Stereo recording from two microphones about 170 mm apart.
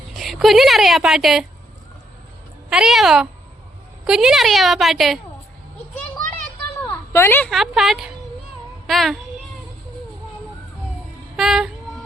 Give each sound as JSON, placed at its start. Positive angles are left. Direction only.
{"t": 0.2, "sound": "a woman's voice", "side_deg": 0}
{"t": 2.6, "sound": "a woman's voice", "side_deg": -5}
{"t": 6.8, "sound": "a sound", "side_deg": 15}
{"t": 7.5, "sound": "a woman's voice", "side_deg": 0}
{"t": 11.3, "sound": "a woman's voice", "side_deg": -5}